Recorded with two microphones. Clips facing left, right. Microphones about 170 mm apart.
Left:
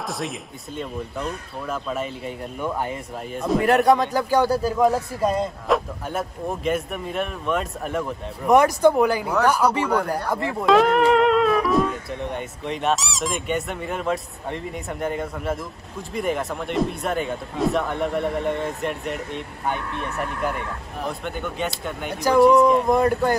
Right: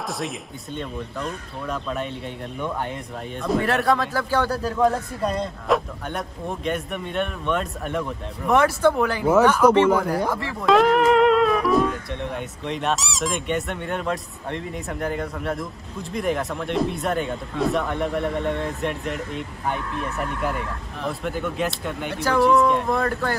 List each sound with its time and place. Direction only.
0.1 s speech: centre (ahead or behind)
3.8 s speech: 20° left (ahead or behind)
4.8 s speech: centre (ahead or behind)
8.5 s speech: 15° left (ahead or behind)
9.8 s speech: 5° right (ahead or behind)
22.8 s speech: 15° left (ahead or behind)